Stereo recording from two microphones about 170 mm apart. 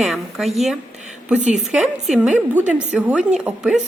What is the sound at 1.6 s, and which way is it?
A woman's voice, centre (ahead or behind).